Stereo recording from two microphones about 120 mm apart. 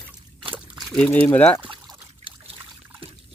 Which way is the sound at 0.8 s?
5° left (ahead or behind).